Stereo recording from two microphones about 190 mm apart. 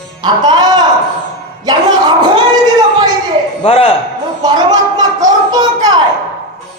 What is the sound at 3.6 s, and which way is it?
Speech, 30° left (ahead or behind).